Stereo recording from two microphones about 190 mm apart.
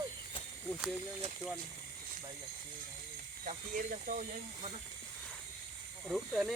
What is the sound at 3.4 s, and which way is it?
Speech, 45° right (ahead or behind).